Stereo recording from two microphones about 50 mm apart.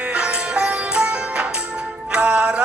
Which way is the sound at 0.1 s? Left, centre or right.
Right.